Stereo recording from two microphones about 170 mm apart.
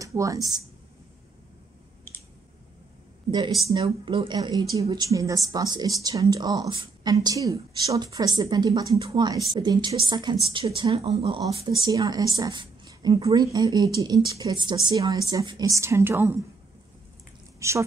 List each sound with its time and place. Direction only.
0.0 s speech: 20° right (ahead or behind)
3.3 s speech: 25° right (ahead or behind)
17.6 s speech: 15° right (ahead or behind)